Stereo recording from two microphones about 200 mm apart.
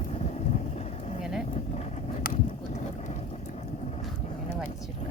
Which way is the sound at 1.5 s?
35° left (ahead or behind).